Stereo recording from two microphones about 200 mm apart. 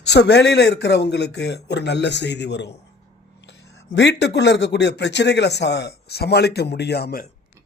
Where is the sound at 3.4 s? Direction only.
55° left (ahead or behind).